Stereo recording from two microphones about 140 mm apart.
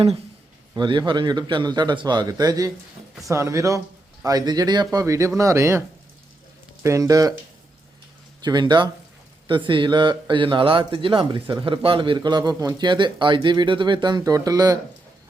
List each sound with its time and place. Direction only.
0.8 s speech: 35° right (ahead or behind)
6.8 s speech: 20° right (ahead or behind)
8.4 s speech: 30° right (ahead or behind)